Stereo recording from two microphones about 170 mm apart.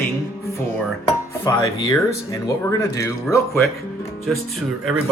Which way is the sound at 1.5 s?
20° left (ahead or behind).